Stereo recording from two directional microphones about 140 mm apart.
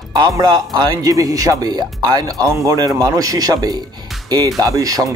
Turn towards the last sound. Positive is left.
turn(degrees=-25)  # may be behind; listen again after turning